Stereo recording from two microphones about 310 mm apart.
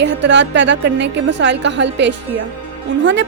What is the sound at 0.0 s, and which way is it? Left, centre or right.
A woman's voice, right.